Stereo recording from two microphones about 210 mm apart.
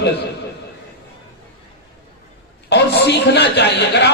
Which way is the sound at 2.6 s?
55° left (ahead or behind).